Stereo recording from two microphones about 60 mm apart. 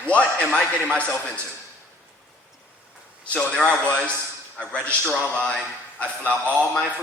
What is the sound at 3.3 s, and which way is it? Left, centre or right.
A man's voice, centre.